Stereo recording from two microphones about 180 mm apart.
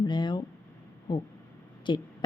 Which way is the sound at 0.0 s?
25° left (ahead or behind).